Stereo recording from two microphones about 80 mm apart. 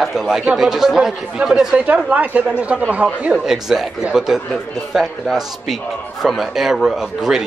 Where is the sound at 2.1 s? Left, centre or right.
Centre.